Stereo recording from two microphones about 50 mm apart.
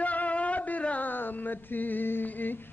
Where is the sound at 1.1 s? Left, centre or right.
Left.